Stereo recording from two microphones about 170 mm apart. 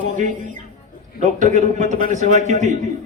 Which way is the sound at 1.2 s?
45° right (ahead or behind).